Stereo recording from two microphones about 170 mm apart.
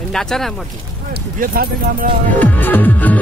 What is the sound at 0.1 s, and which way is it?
Speech, 5° left (ahead or behind).